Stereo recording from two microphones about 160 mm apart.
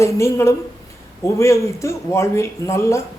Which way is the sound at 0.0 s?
20° left (ahead or behind).